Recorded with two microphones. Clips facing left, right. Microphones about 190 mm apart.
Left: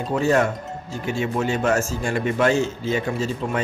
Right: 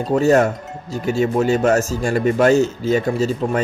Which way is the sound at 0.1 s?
40° right (ahead or behind).